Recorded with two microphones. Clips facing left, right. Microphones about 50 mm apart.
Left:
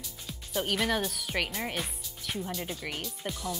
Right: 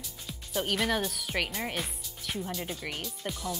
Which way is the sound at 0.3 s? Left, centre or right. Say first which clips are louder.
Even; centre.